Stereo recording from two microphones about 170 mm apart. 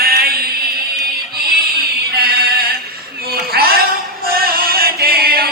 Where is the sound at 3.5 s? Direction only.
65° right (ahead or behind).